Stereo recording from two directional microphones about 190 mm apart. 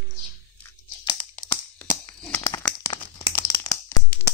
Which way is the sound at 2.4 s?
20° left (ahead or behind).